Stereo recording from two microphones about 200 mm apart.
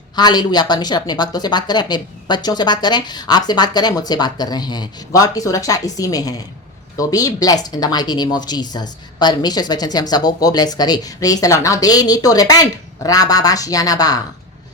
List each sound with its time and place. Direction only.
0.2 s speech: 20° left (ahead or behind)